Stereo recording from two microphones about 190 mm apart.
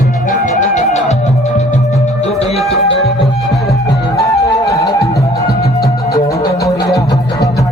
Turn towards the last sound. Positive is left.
turn(degrees=15)  # may be behind; listen again after turning